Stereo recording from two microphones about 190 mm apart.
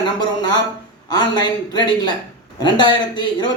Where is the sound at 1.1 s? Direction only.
20° left (ahead or behind).